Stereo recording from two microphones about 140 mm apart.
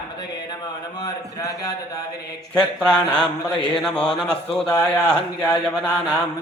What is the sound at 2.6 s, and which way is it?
Speech, 5° left (ahead or behind).